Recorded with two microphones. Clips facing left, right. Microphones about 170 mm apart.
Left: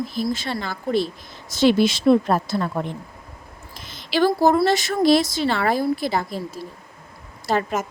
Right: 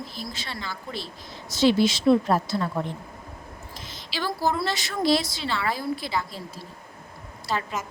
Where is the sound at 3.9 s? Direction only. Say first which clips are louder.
Left 12 dB; 55° left (ahead or behind).